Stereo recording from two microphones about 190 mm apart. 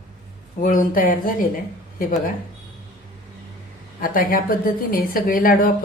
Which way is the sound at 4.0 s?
50° left (ahead or behind).